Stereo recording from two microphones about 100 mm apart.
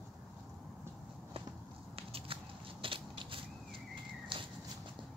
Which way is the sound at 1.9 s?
70° right (ahead or behind).